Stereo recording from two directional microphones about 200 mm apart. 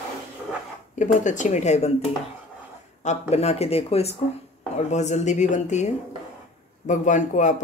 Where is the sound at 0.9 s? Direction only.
40° left (ahead or behind).